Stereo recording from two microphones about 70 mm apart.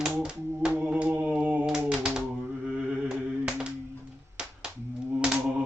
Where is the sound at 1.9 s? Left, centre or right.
Centre.